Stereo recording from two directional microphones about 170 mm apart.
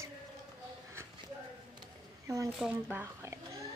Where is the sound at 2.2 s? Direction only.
15° right (ahead or behind).